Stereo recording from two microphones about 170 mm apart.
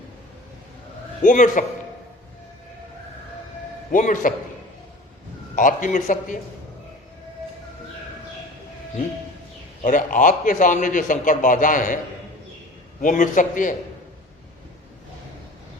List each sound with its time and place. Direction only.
1.2 s a man's voice: 50° left (ahead or behind)
3.9 s a man's voice: 50° left (ahead or behind)
5.5 s a man's voice: 50° left (ahead or behind)
9.8 s a man's voice: 50° left (ahead or behind)
13.0 s a man's voice: 50° left (ahead or behind)